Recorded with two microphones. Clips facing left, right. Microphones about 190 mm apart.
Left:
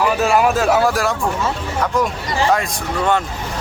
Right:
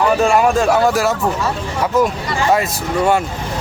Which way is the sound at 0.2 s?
Centre (ahead or behind).